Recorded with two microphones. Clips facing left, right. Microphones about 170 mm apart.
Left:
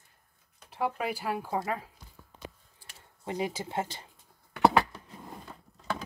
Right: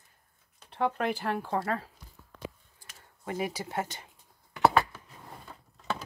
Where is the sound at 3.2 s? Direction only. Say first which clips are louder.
Even; 25° left (ahead or behind).